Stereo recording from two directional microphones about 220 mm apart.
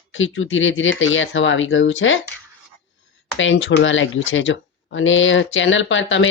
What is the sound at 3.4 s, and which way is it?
Speech, 60° left (ahead or behind).